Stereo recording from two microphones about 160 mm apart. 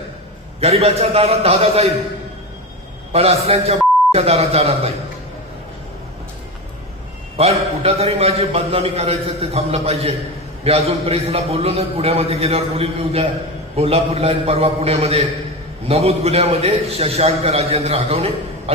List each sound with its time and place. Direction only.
0.6 s a man's voice: 40° right (ahead or behind)
3.1 s speech: 40° right (ahead or behind)
7.3 s a man's voice: 40° right (ahead or behind)